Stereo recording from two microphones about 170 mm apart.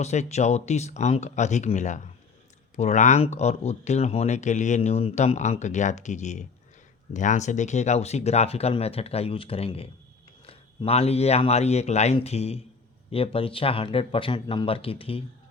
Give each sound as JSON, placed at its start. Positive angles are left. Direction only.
{"t": 0.0, "sound": "speech", "side_deg": 40}